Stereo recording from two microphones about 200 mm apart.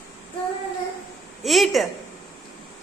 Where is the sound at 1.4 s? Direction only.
Centre (ahead or behind).